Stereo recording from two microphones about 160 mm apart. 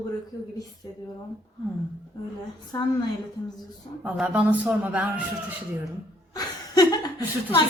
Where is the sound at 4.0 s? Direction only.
10° right (ahead or behind).